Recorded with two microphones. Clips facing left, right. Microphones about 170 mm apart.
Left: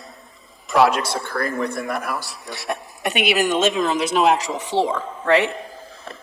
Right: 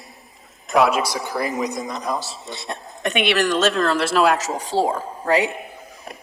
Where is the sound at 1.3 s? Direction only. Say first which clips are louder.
Even; 10° right (ahead or behind).